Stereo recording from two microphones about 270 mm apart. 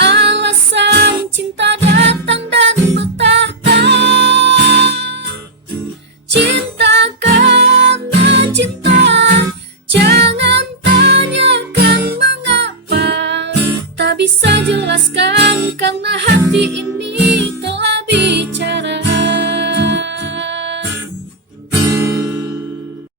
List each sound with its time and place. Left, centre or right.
0.0 s music: right
6.3 s music: right